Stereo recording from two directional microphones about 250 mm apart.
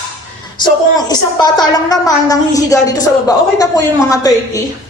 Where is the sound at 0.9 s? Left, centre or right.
Centre.